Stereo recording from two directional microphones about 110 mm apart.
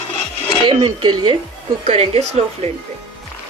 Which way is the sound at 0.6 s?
55° right (ahead or behind).